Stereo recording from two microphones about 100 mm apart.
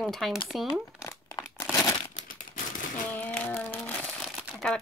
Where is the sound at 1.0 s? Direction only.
30° left (ahead or behind).